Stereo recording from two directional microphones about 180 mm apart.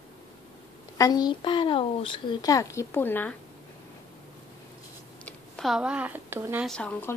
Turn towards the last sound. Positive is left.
turn(degrees=5)  # may be behind; listen again after turning